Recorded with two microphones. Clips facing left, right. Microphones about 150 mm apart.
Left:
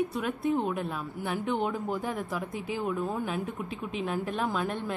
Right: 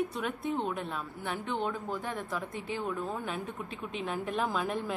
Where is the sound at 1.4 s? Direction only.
20° left (ahead or behind).